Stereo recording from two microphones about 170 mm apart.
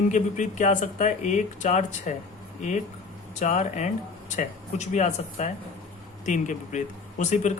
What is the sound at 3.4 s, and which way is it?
A man's voice, 45° left (ahead or behind).